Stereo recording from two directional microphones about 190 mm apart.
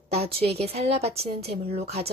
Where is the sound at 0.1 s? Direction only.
30° right (ahead or behind).